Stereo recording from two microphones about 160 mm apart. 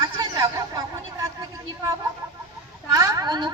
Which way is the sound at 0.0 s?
25° right (ahead or behind).